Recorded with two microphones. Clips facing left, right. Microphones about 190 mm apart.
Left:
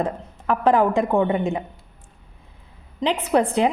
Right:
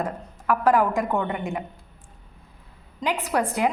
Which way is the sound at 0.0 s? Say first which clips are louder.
Left 3 dB; 30° left (ahead or behind).